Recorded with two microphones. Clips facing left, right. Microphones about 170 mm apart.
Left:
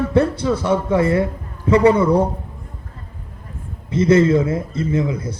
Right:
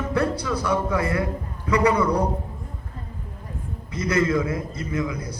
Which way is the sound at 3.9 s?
25° left (ahead or behind).